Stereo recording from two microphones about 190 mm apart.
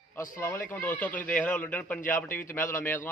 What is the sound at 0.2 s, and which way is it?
A man's voice, 15° left (ahead or behind).